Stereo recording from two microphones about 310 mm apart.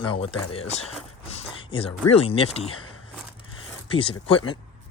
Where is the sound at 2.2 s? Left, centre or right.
Centre.